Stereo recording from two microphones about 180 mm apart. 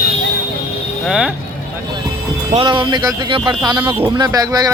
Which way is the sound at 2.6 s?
25° right (ahead or behind).